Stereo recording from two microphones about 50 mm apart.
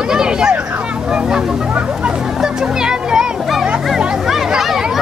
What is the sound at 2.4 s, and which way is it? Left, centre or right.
Music, centre.